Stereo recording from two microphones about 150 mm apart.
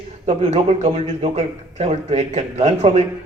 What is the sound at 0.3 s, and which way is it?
A man's voice, 50° right (ahead or behind).